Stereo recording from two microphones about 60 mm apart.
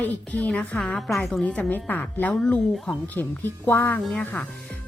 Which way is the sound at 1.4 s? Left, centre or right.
Left.